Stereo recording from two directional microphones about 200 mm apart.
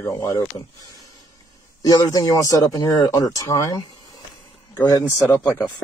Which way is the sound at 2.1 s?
15° left (ahead or behind).